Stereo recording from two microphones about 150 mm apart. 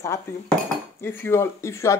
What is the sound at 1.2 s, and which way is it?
Speech, 15° left (ahead or behind).